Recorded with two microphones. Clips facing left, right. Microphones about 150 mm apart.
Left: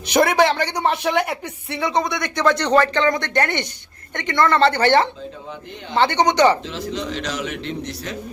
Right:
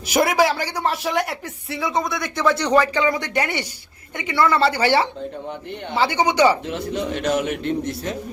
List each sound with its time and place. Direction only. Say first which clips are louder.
0.1 s speech: left 2 dB; 5° right (ahead or behind)
6.7 s a man's voice: right 2 dB; 60° right (ahead or behind)